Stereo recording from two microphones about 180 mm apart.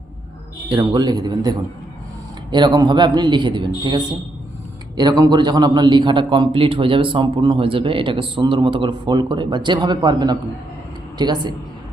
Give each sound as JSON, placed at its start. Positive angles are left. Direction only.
{"t": 0.7, "sound": "a man's voice", "side_deg": -20}
{"t": 4.9, "sound": "a man's voice", "side_deg": -20}